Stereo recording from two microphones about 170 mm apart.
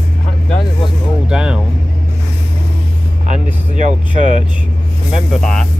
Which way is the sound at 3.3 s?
45° right (ahead or behind).